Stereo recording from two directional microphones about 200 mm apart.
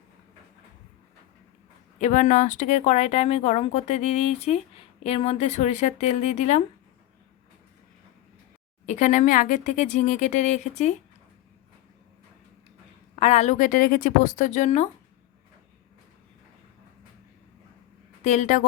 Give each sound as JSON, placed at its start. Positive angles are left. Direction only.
{"t": 2.0, "sound": "speech", "side_deg": 35}
{"t": 8.9, "sound": "speech", "side_deg": 40}
{"t": 13.1, "sound": "speech", "side_deg": 35}
{"t": 18.2, "sound": "a woman's voice", "side_deg": 35}